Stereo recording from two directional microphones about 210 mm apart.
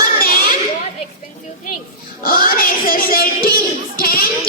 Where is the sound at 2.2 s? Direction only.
45° left (ahead or behind).